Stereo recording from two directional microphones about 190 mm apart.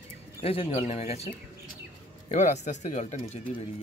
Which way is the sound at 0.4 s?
30° left (ahead or behind).